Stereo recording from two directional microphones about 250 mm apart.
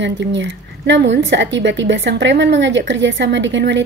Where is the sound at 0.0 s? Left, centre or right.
Right.